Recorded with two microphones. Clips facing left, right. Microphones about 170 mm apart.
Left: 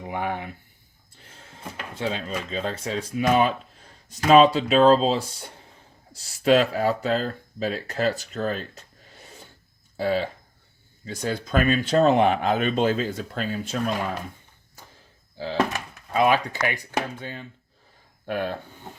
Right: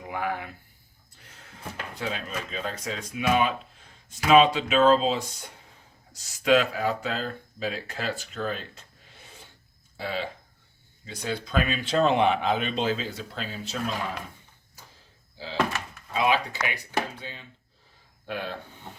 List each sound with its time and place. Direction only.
0.0 s speech: 25° left (ahead or behind)
2.0 s speech: 30° left (ahead or behind)
6.2 s speech: 35° left (ahead or behind)
10.0 s speech: 40° left (ahead or behind)
15.4 s speech: 50° left (ahead or behind)